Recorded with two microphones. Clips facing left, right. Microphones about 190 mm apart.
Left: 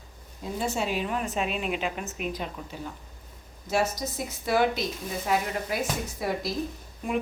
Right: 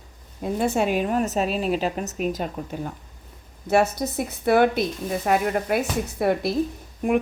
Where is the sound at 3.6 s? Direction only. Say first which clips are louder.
Right 7 dB; 60° right (ahead or behind).